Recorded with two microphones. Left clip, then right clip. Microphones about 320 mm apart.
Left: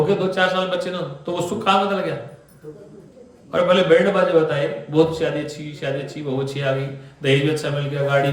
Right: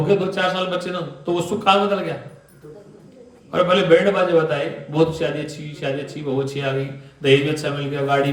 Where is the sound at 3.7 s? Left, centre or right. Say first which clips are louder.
Right 1 dB; right.